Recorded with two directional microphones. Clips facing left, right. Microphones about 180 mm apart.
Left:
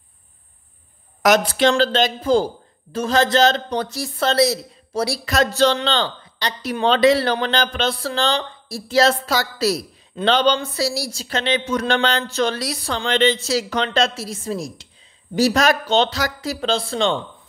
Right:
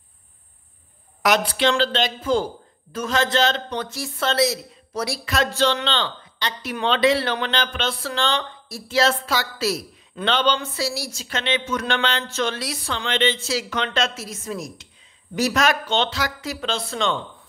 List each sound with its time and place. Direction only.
1.2 s speech: 45° left (ahead or behind)